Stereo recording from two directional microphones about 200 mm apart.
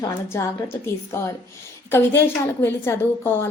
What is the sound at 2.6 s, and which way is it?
Speech, 10° left (ahead or behind).